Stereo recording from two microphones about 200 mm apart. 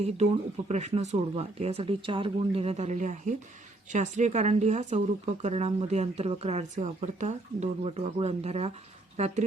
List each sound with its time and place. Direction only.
0.0 s a woman's voice: 35° right (ahead or behind)